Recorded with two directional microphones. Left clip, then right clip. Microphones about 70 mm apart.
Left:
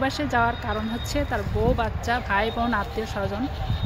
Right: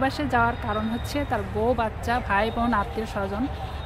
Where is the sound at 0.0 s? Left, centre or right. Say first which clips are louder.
Even; right.